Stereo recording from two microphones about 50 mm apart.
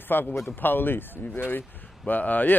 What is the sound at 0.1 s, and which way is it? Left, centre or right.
Speech, left.